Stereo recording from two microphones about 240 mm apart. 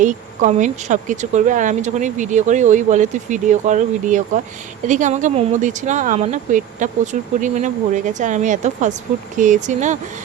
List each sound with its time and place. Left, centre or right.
0.0 s speech: right